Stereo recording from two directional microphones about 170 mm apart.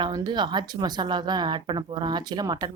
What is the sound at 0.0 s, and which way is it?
A woman's voice, 25° right (ahead or behind).